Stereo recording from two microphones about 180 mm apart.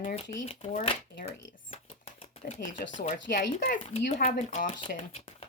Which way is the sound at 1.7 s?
35° left (ahead or behind).